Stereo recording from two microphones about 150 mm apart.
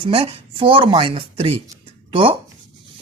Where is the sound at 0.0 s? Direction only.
40° right (ahead or behind).